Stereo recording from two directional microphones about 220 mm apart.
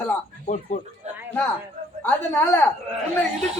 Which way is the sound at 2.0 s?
10° left (ahead or behind).